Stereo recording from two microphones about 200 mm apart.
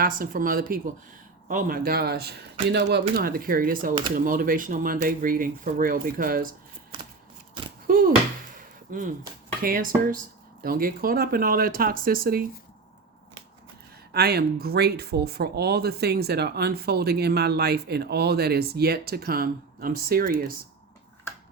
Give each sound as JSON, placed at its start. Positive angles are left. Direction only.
{"t": 0.0, "sound": "speech", "side_deg": -45}
{"t": 7.9, "sound": "a sound", "side_deg": -45}
{"t": 9.6, "sound": "speech", "side_deg": -45}
{"t": 14.1, "sound": "speech", "side_deg": -50}